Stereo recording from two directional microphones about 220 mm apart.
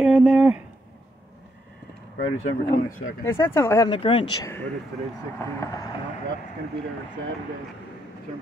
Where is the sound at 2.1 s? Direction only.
50° left (ahead or behind).